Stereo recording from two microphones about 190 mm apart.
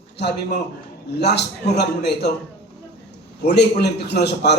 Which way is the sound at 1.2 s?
65° left (ahead or behind).